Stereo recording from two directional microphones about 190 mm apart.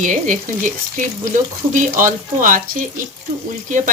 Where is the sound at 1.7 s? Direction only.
45° right (ahead or behind).